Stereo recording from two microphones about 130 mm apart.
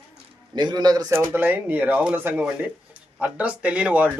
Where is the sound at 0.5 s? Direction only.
35° right (ahead or behind).